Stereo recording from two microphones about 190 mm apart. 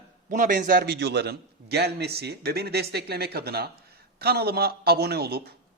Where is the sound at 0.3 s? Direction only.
45° right (ahead or behind).